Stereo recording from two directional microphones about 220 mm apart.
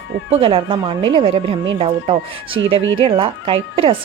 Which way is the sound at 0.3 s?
25° right (ahead or behind).